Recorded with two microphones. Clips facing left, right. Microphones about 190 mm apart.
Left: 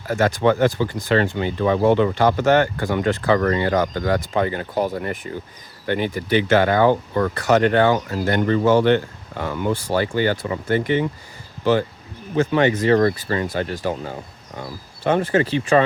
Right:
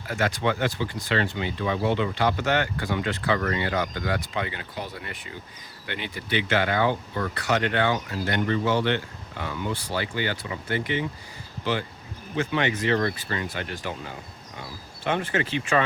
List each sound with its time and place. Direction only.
0.1 s speech: 45° left (ahead or behind)